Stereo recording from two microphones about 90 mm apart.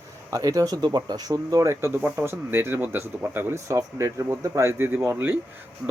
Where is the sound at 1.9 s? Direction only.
20° right (ahead or behind).